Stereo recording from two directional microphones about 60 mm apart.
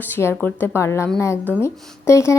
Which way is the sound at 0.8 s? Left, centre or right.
Left.